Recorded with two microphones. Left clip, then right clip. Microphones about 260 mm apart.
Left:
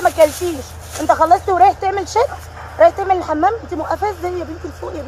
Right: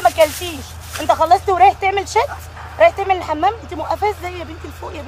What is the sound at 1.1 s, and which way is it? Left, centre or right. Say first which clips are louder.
Speech: left 1 dB; right.